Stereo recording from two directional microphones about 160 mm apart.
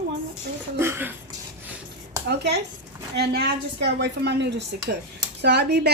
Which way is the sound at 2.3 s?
90° right.